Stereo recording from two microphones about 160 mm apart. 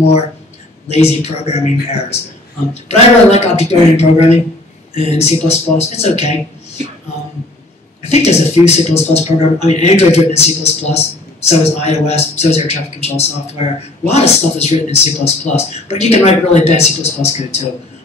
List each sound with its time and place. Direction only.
0.8 s speech: 40° left (ahead or behind)
8.1 s speech: 40° left (ahead or behind)